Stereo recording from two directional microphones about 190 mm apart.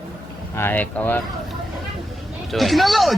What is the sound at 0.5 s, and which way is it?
Speech, 10° left (ahead or behind).